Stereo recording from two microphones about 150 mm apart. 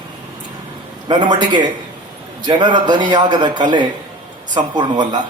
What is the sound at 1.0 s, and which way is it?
A man's voice, 30° right (ahead or behind).